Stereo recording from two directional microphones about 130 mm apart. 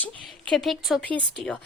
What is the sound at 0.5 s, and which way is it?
A woman's voice, centre (ahead or behind).